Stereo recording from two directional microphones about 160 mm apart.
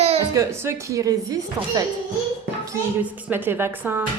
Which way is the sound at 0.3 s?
15° right (ahead or behind).